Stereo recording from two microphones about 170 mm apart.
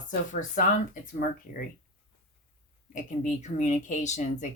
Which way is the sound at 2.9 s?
45° left (ahead or behind).